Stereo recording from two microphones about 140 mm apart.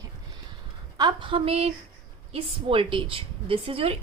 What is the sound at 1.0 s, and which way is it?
A woman's voice, 35° right (ahead or behind).